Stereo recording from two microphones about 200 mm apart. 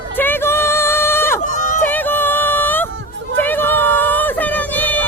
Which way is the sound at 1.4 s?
40° left (ahead or behind).